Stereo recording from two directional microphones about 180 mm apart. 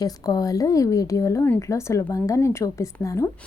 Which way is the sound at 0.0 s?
20° left (ahead or behind).